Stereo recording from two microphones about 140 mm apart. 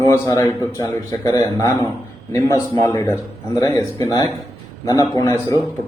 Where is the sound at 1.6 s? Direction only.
30° right (ahead or behind).